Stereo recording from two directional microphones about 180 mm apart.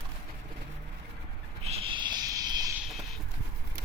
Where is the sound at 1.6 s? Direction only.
30° right (ahead or behind).